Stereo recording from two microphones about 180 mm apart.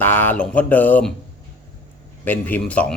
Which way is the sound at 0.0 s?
10° left (ahead or behind).